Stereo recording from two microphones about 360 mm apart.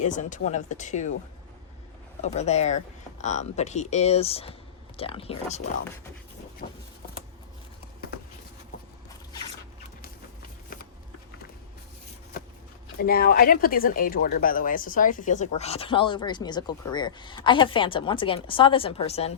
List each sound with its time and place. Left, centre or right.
0.0 s speech: centre
2.2 s speech: centre
13.0 s speech: left